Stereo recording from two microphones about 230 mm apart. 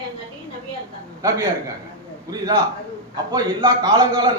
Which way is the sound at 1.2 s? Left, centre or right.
Centre.